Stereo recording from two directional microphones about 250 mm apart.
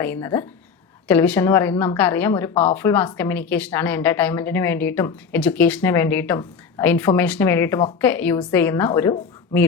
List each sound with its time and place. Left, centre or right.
0.0 s speech: centre
2.5 s speech: left
2.7 s speech: centre